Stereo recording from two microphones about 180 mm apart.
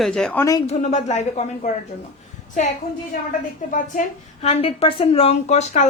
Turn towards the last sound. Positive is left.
turn(degrees=40)  # may be behind; listen again after turning